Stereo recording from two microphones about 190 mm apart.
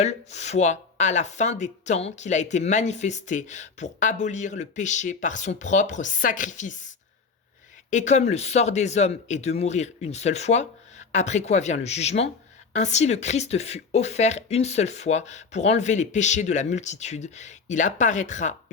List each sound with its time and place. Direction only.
0.0 s speech: 35° left (ahead or behind)